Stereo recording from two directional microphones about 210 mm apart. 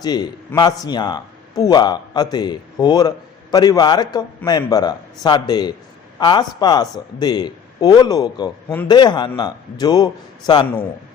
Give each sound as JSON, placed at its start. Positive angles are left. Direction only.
{"t": 0.0, "sound": "a man's voice", "side_deg": 20}